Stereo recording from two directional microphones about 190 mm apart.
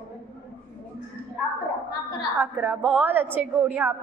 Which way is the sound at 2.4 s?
5° right (ahead or behind).